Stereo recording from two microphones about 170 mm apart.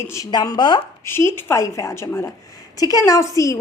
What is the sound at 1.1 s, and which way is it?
A woman's voice, 15° left (ahead or behind).